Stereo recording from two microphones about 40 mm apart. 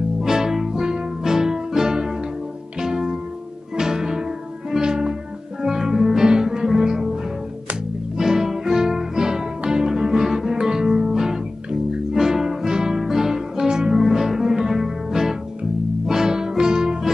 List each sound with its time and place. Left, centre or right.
0.2 s music: centre
8.2 s music: centre